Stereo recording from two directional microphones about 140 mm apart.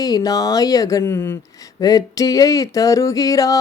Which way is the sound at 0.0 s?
25° left (ahead or behind).